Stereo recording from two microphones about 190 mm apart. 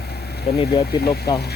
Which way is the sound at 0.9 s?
55° left (ahead or behind).